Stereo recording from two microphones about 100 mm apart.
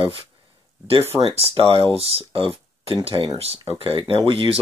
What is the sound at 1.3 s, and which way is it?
Speech, 75° right (ahead or behind).